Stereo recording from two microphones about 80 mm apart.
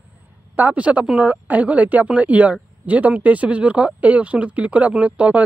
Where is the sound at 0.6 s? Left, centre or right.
Centre.